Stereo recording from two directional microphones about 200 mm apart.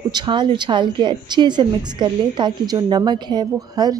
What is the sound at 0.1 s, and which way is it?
A woman's voice, 25° right (ahead or behind).